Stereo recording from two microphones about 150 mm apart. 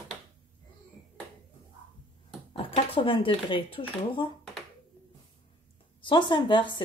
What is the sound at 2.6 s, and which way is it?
Speech, 40° left (ahead or behind).